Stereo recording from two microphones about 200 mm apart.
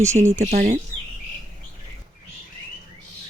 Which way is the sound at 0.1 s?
30° right (ahead or behind).